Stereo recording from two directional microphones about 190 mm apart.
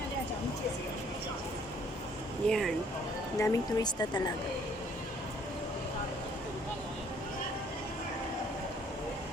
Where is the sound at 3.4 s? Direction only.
20° left (ahead or behind).